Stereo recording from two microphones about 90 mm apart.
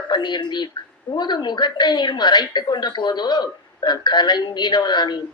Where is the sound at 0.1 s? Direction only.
55° left (ahead or behind).